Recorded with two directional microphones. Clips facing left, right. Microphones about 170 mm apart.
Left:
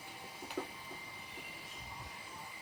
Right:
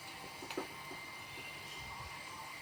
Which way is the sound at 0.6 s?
5° left (ahead or behind).